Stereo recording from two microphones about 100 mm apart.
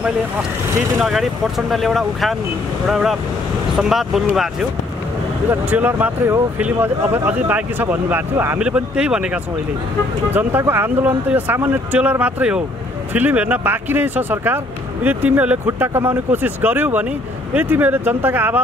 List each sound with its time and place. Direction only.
1.7 s speech: centre (ahead or behind)
5.5 s speech: 15° right (ahead or behind)
10.3 s speech: 20° right (ahead or behind)